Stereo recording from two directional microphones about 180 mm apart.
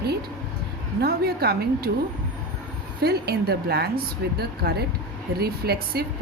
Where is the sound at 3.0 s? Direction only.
60° right (ahead or behind).